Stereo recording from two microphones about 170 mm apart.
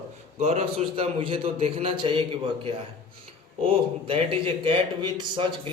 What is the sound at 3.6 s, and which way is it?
A man's voice, 30° right (ahead or behind).